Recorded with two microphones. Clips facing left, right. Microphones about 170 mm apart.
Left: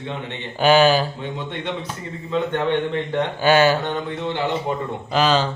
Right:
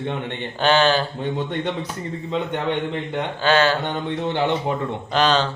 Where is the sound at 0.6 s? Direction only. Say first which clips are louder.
Left 3 dB; 10° left (ahead or behind).